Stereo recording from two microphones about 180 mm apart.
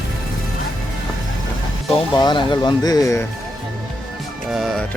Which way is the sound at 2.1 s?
25° left (ahead or behind).